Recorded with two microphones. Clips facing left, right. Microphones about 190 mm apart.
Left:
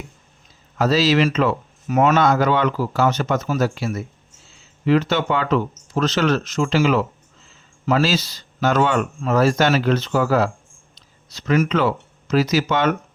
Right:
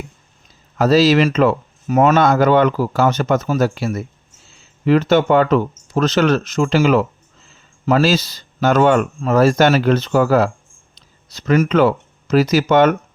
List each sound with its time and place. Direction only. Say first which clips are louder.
0.8 s speech: right 4 dB; 45° right (ahead or behind)
4.9 s speech: right 5 dB; 50° right (ahead or behind)